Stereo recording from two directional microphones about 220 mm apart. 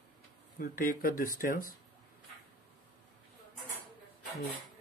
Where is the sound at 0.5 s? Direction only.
40° left (ahead or behind).